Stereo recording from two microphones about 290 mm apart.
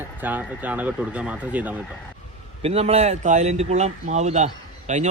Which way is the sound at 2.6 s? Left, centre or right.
Right.